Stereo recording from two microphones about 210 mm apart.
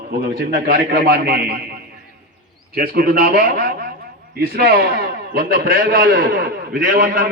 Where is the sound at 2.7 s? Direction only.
45° right (ahead or behind).